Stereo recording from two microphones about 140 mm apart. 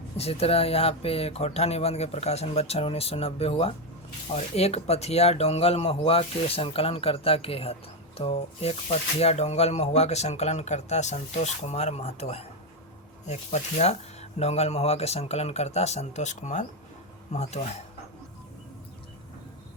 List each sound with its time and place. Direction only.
0.2 s speech: 45° left (ahead or behind)